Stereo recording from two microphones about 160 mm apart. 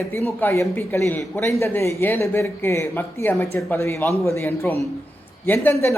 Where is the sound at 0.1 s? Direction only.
15° left (ahead or behind).